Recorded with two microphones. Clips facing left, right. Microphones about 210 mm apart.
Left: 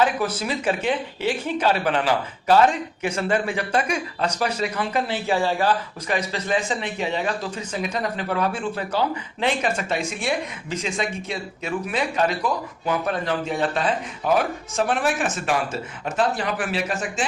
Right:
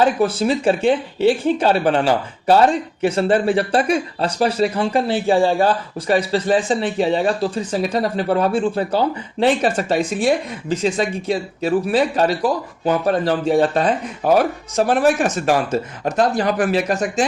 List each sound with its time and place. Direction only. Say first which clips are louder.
0.0 s speech: right 6 dB; 30° right (ahead or behind)